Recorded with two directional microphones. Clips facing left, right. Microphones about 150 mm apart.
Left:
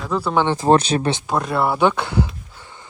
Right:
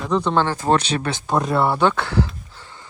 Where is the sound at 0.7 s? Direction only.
25° left (ahead or behind).